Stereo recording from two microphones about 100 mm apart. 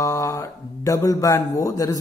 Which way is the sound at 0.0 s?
30° left (ahead or behind).